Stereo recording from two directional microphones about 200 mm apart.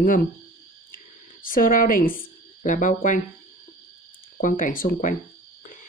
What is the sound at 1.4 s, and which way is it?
A woman's voice, 45° left (ahead or behind).